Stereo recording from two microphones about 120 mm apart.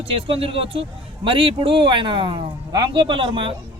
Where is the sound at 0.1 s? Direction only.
50° right (ahead or behind).